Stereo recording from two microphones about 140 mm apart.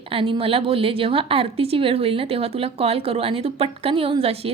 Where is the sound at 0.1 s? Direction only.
40° right (ahead or behind).